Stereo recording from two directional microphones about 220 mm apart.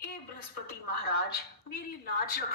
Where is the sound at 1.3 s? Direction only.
45° left (ahead or behind).